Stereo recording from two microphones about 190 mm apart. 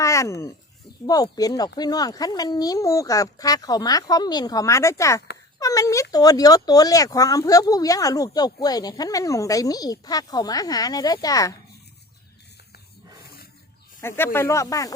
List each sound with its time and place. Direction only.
0.0 s a sound: 15° left (ahead or behind)
1.0 s speech: 20° left (ahead or behind)
13.2 s wild animals: 55° left (ahead or behind)
14.0 s speech: 15° left (ahead or behind)